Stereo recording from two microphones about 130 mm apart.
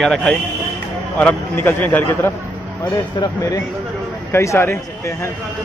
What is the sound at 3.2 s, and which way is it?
Speech, 25° left (ahead or behind).